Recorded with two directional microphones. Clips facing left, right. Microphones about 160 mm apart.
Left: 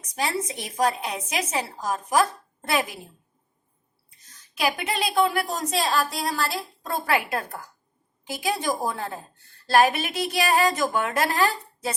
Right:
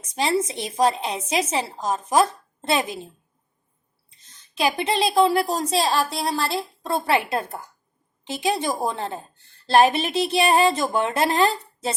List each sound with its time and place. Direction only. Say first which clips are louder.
0.1 s a woman's voice: right 5 dB; 25° right (ahead or behind)
4.2 s a woman's voice: right 3 dB; 25° right (ahead or behind)